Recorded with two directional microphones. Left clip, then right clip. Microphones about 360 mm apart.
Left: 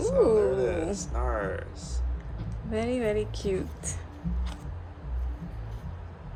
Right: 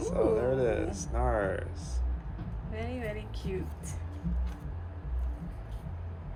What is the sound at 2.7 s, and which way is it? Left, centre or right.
A woman's voice, centre.